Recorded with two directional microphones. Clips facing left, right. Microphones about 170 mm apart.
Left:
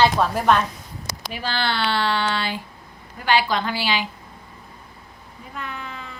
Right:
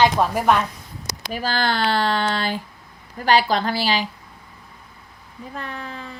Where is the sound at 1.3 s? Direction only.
40° right (ahead or behind).